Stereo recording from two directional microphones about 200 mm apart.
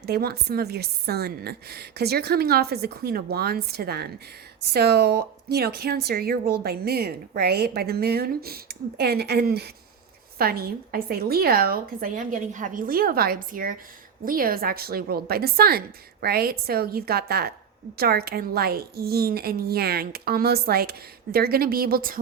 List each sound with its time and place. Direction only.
0.0 s a woman's voice: 50° right (ahead or behind)